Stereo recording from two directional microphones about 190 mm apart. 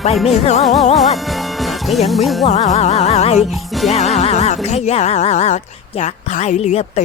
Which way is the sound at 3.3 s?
Centre (ahead or behind).